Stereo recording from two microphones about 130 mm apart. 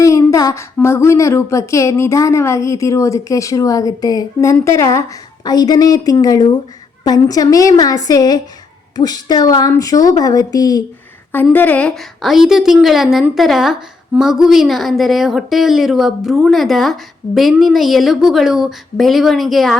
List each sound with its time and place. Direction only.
0.0 s speech: 25° left (ahead or behind)
11.5 s speech: 15° left (ahead or behind)